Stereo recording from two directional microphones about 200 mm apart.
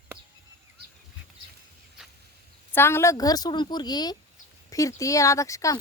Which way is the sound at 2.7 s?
10° left (ahead or behind).